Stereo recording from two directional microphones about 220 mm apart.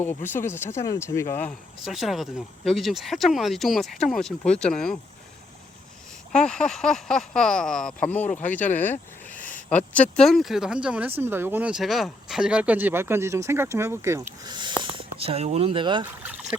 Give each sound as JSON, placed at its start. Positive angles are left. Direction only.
{"t": 0.0, "sound": "speech", "side_deg": 10}
{"t": 6.3, "sound": "speech", "side_deg": 5}